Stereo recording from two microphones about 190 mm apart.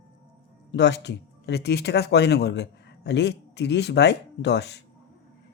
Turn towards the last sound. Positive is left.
turn(degrees=65)  # may be behind; listen again after turning